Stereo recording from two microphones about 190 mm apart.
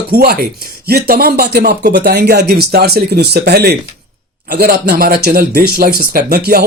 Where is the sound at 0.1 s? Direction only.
55° right (ahead or behind).